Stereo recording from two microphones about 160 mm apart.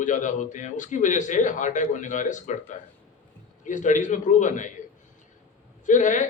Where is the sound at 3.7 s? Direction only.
50° left (ahead or behind).